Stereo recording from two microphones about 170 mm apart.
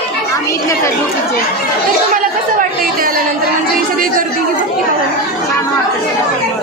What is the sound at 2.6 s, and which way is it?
Chatter, 55° right (ahead or behind).